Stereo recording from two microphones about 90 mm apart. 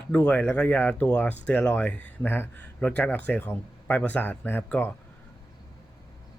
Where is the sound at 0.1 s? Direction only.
15° left (ahead or behind).